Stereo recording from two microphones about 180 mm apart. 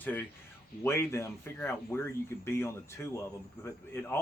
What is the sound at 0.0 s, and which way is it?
Speech, 10° left (ahead or behind).